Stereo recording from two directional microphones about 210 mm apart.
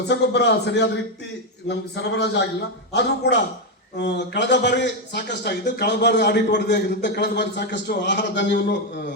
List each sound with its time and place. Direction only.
0.1 s a man's voice: 55° left (ahead or behind)